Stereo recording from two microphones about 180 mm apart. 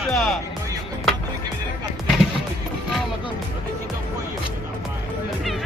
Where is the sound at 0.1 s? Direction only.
Centre (ahead or behind).